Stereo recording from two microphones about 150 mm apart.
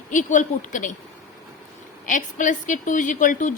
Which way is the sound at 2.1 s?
60° left (ahead or behind).